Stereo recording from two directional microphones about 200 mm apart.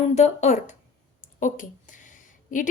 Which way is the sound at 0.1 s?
35° left (ahead or behind).